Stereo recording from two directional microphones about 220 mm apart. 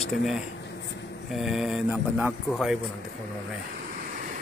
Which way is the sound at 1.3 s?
Centre (ahead or behind).